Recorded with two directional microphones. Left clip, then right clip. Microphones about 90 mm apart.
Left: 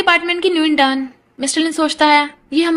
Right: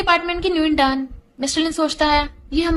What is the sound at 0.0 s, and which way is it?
A woman's voice, 40° left (ahead or behind).